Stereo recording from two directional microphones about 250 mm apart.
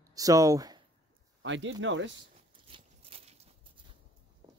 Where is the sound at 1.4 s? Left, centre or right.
Right.